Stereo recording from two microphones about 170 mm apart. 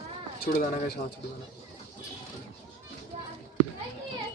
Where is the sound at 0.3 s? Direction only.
65° left (ahead or behind).